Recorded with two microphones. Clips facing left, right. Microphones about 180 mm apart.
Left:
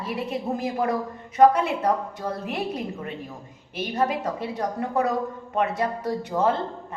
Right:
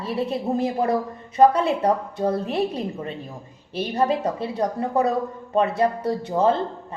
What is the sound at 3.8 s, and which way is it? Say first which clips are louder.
A woman's voice: right 3 dB; 30° right (ahead or behind).